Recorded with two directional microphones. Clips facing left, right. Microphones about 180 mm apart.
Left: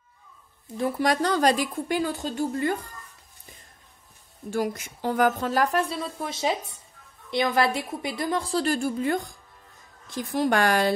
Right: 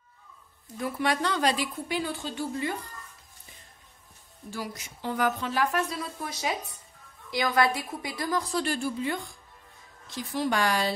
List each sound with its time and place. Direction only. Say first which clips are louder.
0.7 s a woman's voice: left 4 dB; 35° left (ahead or behind)
4.5 s a woman's voice: left 9 dB; 50° left (ahead or behind)